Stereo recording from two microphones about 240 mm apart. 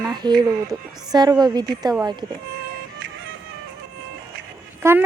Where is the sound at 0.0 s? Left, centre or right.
Centre.